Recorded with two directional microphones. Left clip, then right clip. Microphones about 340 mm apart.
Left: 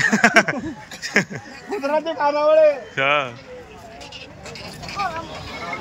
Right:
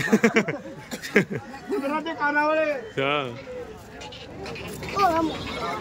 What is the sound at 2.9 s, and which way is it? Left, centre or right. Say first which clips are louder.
Speech: left 6 dB; centre.